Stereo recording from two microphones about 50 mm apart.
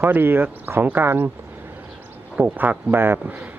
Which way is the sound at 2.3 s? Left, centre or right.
Right.